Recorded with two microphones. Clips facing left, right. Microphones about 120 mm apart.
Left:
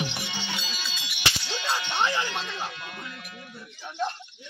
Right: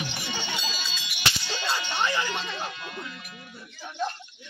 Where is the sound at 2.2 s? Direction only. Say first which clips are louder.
Right 1 dB; centre (ahead or behind).